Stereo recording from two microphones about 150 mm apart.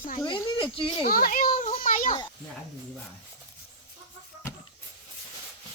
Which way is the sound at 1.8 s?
60° left (ahead or behind).